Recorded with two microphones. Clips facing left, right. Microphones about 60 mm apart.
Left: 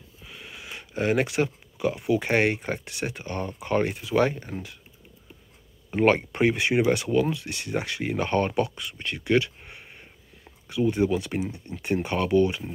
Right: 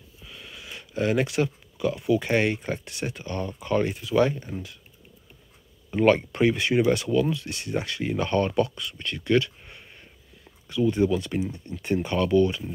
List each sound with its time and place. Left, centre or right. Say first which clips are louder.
0.3 s a sound: left 1 dB; left
2.3 s speech: left 1 dB; left
2.8 s speech: left 1 dB; left
5.9 s speech: right 1 dB; left
6.5 s speech: even; left
7.1 s speech: even; left
7.3 s speech: even; left
9.8 s a sound: left 1 dB; left
11.8 s speech: right 1 dB; left